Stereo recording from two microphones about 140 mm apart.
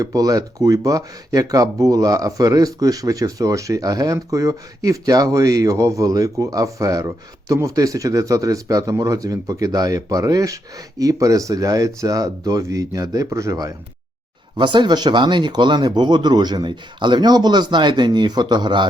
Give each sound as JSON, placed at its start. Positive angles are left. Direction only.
{"t": 0.0, "sound": "speech", "side_deg": -25}
{"t": 14.5, "sound": "speech", "side_deg": -35}